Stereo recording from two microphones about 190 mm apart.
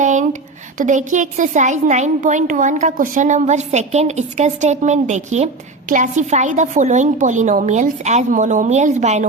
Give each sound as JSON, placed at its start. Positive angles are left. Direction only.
{"t": 0.0, "sound": "a woman's voice", "side_deg": -40}